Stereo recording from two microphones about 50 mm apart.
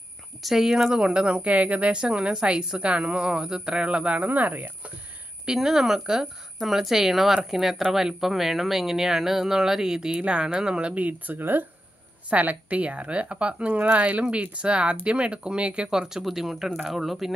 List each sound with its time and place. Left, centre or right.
0.4 s speech: centre; by 4.7 s right
5.4 s speech: centre; by 11.3 s right
11.3 s speech: right
12.3 s speech: right
15.9 s speech: centre